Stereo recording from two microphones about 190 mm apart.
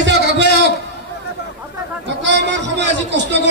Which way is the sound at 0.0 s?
65° right (ahead or behind).